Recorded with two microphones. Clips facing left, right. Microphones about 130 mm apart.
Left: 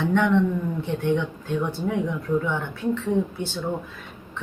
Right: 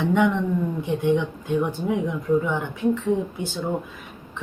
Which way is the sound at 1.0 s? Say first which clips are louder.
Right 3 dB; 10° right (ahead or behind).